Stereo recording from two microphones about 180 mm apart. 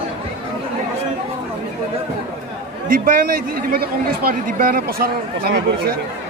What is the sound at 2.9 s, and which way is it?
Speech, 50° right (ahead or behind).